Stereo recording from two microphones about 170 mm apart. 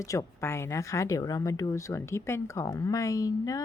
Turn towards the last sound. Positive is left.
turn(degrees=20)  # may be behind; listen again after turning